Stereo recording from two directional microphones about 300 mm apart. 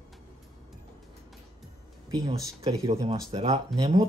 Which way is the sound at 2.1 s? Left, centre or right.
Centre.